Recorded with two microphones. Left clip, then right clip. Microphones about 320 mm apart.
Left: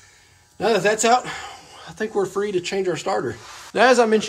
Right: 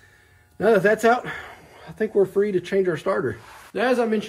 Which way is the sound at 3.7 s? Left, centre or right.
Centre.